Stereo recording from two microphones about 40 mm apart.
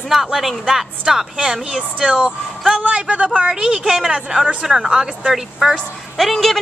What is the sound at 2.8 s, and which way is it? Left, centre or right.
Speech, right.